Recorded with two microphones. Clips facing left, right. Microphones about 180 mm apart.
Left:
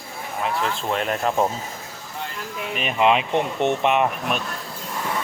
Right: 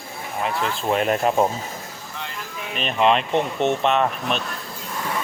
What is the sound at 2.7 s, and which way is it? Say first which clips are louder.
Speech: even; 10° left (ahead or behind).